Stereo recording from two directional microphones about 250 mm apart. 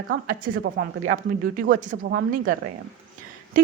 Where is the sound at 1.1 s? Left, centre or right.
Right.